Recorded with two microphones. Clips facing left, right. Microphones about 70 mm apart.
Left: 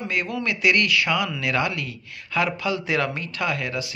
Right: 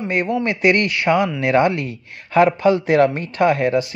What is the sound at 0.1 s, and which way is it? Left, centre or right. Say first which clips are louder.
Speech: right 7 dB; right.